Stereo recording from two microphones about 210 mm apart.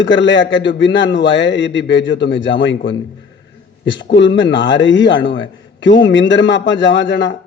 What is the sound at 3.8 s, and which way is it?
A man's voice, 60° left (ahead or behind).